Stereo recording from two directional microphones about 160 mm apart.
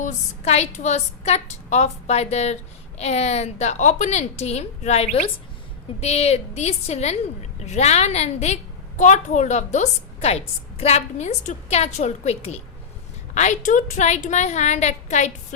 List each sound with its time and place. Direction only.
0.0 s a woman's voice: 45° left (ahead or behind)